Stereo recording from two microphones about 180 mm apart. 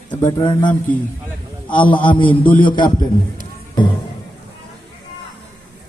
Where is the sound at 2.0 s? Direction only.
30° left (ahead or behind).